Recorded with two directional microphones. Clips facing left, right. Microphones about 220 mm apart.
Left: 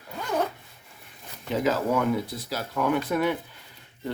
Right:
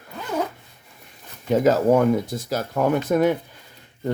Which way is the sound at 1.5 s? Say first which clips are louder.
Right 8 dB; 45° right (ahead or behind).